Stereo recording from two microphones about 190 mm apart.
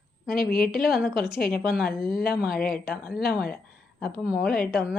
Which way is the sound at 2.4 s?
50° left (ahead or behind).